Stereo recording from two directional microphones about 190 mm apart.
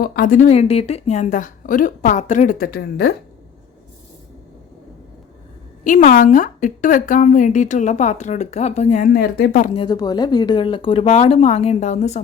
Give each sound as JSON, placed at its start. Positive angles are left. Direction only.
{"t": 0.0, "sound": "a woman's voice", "side_deg": 45}
{"t": 5.8, "sound": "a woman's voice", "side_deg": 45}
{"t": 9.6, "sound": "speech", "side_deg": 25}